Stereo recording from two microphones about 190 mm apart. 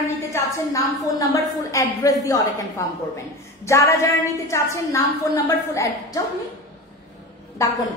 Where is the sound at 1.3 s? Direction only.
15° left (ahead or behind).